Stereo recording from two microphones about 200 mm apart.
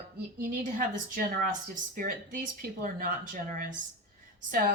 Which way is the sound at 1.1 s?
45° right (ahead or behind).